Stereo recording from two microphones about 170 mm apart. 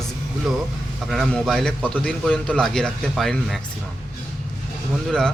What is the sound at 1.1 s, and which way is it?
Speech, centre (ahead or behind).